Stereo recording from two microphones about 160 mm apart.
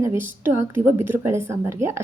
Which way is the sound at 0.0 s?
15° right (ahead or behind).